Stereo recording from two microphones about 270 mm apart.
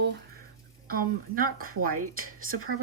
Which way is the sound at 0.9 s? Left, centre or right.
Right.